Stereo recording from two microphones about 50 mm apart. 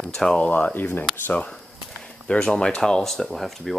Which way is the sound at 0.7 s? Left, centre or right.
Left.